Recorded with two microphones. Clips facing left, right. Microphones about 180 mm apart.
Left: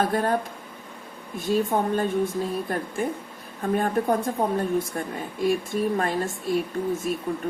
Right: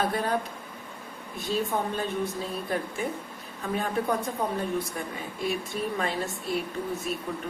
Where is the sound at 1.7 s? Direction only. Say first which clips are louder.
Left 6 dB; 50° left (ahead or behind).